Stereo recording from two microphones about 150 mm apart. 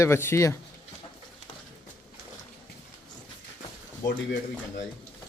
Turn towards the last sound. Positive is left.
turn(degrees=25)  # may be behind; listen again after turning